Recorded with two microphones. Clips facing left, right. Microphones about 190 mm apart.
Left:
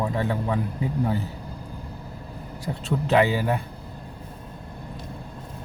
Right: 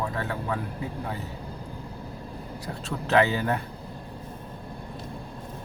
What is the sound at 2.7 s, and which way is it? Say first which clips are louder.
Speech: left 3 dB; 10° left (ahead or behind).